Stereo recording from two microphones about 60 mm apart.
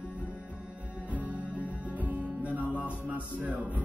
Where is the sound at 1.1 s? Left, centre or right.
Right.